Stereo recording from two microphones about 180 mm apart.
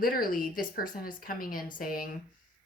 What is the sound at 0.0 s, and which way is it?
Speech, 50° left (ahead or behind).